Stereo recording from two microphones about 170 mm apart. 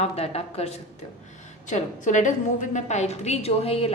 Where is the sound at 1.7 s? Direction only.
45° left (ahead or behind).